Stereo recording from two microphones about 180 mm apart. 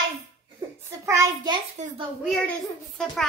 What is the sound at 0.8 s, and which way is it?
Hands, 15° right (ahead or behind).